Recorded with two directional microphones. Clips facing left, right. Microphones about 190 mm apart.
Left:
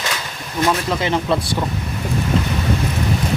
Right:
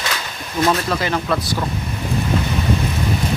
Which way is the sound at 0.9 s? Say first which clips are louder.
Left 1 dB; 20° left (ahead or behind).